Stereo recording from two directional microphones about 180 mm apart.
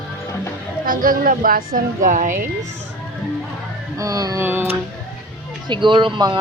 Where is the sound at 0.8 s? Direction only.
50° right (ahead or behind).